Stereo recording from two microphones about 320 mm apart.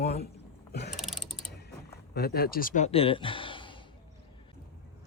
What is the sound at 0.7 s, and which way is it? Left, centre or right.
Mechanisms, left.